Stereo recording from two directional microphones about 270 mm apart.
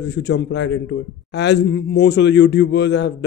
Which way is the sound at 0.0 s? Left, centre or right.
Left.